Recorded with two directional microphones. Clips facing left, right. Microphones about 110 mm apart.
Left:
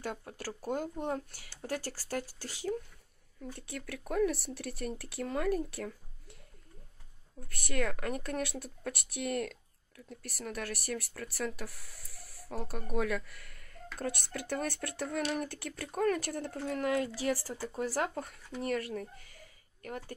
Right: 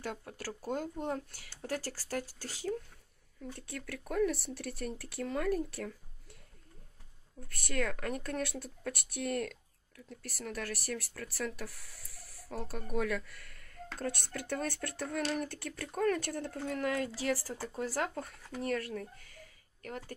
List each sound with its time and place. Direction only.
0.0 s speech: 15° left (ahead or behind)
3.4 s speech: 10° left (ahead or behind)
7.4 s speech: 10° left (ahead or behind)
12.4 s speech: 15° left (ahead or behind)